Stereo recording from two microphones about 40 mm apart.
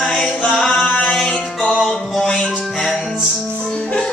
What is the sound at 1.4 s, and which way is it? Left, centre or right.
Music, left.